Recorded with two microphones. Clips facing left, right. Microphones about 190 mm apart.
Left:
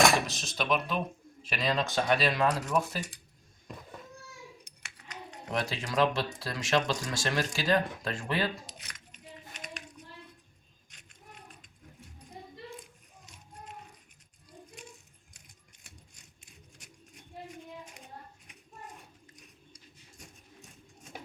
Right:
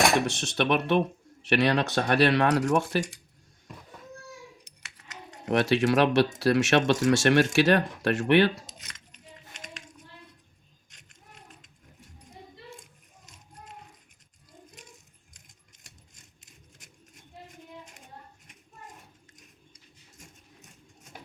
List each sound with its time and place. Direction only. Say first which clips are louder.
0.3 s speech: right 5 dB; 65° right (ahead or behind); by 3.1 s 80° right
5.0 s speech: right 8 dB; 70° right (ahead or behind)